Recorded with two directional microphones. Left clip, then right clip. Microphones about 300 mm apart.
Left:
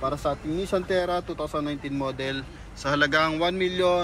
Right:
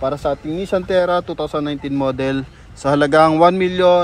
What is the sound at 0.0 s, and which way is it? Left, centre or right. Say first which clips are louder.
Speech: right 7 dB; right.